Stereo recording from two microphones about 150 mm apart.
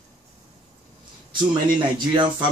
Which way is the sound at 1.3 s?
30° right (ahead or behind).